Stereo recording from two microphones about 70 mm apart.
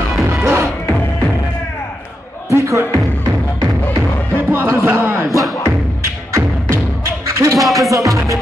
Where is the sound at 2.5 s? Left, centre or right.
Right.